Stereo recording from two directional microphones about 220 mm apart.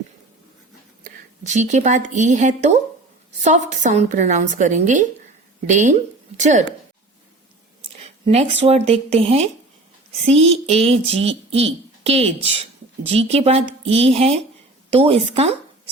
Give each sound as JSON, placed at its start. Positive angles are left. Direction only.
{"t": 1.5, "sound": "a woman's voice", "side_deg": -30}
{"t": 8.0, "sound": "speech", "side_deg": -30}